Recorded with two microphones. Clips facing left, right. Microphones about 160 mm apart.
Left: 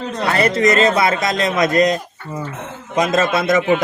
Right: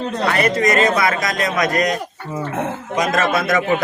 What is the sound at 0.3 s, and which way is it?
A man's voice, 30° left (ahead or behind).